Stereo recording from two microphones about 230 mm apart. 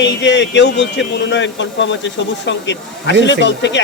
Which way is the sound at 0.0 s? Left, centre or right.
Left.